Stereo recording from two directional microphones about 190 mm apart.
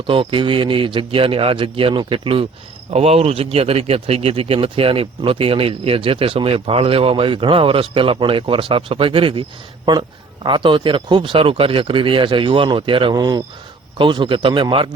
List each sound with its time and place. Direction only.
0.1 s speech: 30° right (ahead or behind)